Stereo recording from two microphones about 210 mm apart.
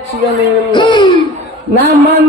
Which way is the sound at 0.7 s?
20° left (ahead or behind).